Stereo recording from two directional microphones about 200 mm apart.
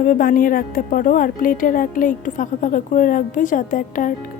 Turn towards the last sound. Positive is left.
turn(degrees=40)  # may be behind; listen again after turning